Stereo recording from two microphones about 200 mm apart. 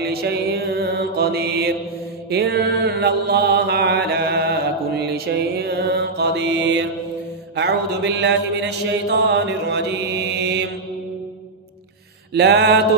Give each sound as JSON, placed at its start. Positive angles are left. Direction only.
{"t": 0.0, "sound": "mantra", "side_deg": -50}
{"t": 12.4, "sound": "mantra", "side_deg": -55}